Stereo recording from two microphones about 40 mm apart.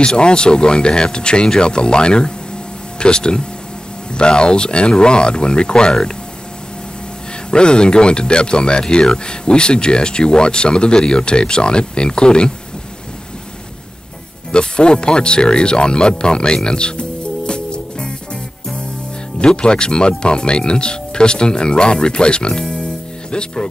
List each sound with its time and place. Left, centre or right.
0.0 s speech: left
7.5 s speech: left
14.5 s speech: left
17.5 s music: left
19.4 s speech: left